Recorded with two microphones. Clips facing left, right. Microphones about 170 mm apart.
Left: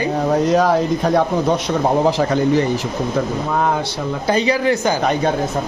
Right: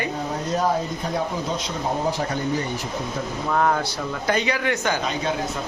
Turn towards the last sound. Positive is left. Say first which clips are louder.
# left 7 dB
turn(degrees=55)  # may be behind; listen again after turning